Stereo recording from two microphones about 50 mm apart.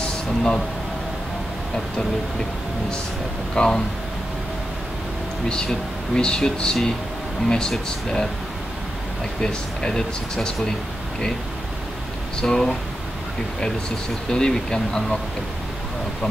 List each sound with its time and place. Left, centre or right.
0.0 s a sound: centre
3.5 s speech: centre
5.5 s speech: centre
9.4 s speech: centre
12.4 s speech: centre
14.3 s speech: centre